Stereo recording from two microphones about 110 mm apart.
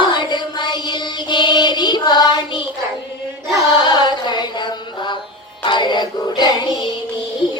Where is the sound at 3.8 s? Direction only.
40° left (ahead or behind).